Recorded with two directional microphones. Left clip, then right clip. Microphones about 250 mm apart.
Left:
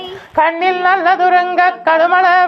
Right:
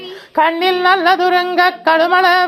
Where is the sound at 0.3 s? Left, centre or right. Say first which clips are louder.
Left 1 dB; right.